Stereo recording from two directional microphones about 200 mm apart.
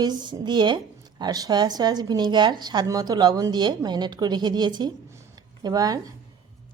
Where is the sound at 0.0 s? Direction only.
20° right (ahead or behind).